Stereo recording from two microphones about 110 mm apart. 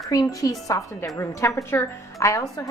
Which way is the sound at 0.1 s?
30° left (ahead or behind).